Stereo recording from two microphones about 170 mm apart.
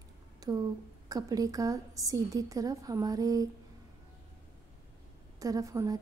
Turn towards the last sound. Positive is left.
turn(degrees=-20)  # may be behind; listen again after turning